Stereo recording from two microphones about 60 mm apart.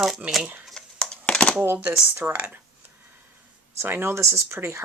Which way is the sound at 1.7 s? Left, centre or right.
Right.